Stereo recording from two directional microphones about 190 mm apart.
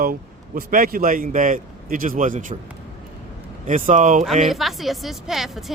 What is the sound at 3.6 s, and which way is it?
Speech, 40° right (ahead or behind).